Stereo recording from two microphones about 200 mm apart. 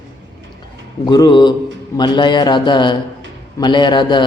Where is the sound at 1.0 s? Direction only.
20° left (ahead or behind).